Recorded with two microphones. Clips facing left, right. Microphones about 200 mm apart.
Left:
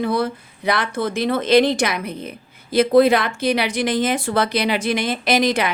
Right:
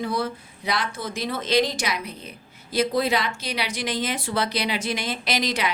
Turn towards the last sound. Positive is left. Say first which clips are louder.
# left 7 dB
turn(degrees=50)  # may be behind; listen again after turning